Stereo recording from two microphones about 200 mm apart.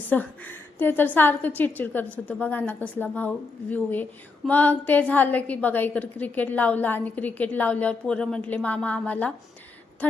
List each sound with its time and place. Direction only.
0.1 s a woman's voice: 10° left (ahead or behind)